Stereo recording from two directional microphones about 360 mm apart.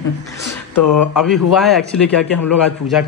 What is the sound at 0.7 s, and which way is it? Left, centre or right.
Speech, left.